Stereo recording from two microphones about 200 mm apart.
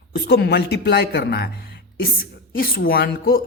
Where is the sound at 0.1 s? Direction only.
50° left (ahead or behind).